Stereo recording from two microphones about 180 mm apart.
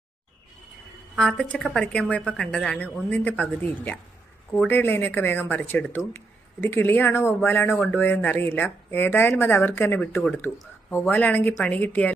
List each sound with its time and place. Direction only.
1.1 s a woman's voice: 5° left (ahead or behind)